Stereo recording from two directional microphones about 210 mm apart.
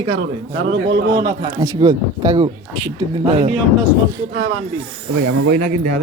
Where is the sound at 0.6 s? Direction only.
60° right (ahead or behind).